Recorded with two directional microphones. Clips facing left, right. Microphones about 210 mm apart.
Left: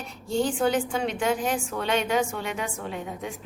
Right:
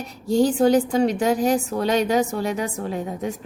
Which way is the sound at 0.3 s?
40° right (ahead or behind).